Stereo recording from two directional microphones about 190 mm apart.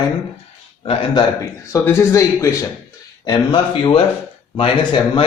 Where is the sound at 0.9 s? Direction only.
25° left (ahead or behind).